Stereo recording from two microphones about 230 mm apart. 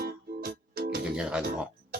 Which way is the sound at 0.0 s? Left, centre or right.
Right.